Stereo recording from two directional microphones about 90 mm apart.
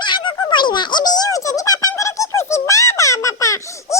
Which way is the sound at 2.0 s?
35° left (ahead or behind).